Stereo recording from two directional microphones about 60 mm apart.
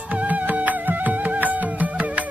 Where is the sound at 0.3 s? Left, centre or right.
Right.